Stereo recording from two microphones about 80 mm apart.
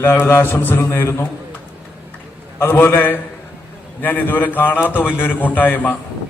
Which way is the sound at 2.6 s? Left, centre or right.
Left.